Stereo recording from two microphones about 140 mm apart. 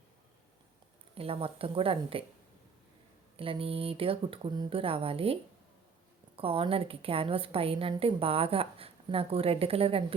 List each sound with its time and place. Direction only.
1.1 s speech: 40° right (ahead or behind)
3.3 s a woman's voice: 40° right (ahead or behind)